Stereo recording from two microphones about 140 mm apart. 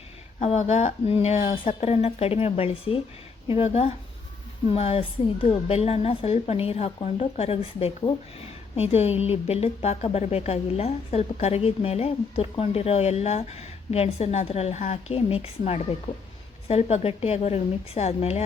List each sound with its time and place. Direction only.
0.3 s a woman's voice: 55° left (ahead or behind)